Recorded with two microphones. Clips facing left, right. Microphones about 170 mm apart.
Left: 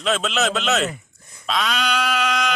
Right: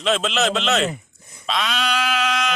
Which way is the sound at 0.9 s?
20° right (ahead or behind).